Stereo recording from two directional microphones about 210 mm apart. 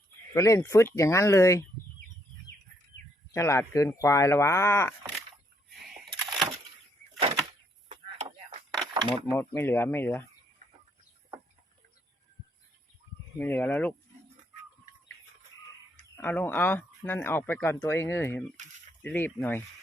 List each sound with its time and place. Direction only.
0.3 s speech: 15° left (ahead or behind)
3.3 s speech: 15° left (ahead or behind)
7.9 s a sound: 30° right (ahead or behind)
9.2 s speech: 10° left (ahead or behind)
13.4 s speech: 10° left (ahead or behind)
16.1 s speech: 10° left (ahead or behind)